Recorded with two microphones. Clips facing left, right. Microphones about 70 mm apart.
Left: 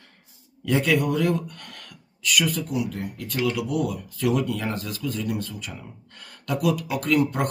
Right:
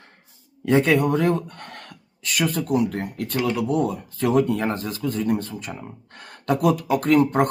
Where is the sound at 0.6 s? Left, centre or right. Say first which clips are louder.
Right 4 dB; right.